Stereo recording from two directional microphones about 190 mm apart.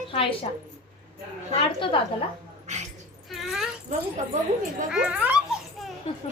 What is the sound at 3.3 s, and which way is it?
Whimper, centre (ahead or behind).